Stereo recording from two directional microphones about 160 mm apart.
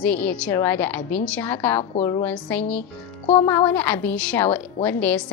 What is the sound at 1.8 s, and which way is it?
Speech, 35° left (ahead or behind).